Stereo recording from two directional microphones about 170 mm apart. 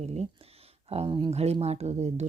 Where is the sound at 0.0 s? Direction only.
40° right (ahead or behind).